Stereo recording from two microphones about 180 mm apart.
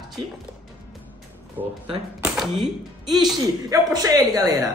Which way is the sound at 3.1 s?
20° right (ahead or behind).